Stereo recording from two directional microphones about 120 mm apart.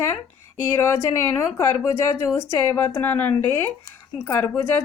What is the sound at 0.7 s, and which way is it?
A woman's voice, 20° left (ahead or behind).